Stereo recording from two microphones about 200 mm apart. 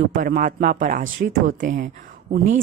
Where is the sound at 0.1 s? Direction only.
45° right (ahead or behind).